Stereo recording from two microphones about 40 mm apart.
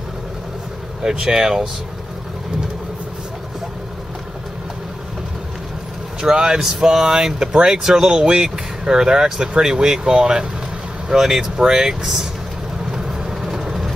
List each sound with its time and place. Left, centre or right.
1.2 s speech: centre
6.2 s speech: centre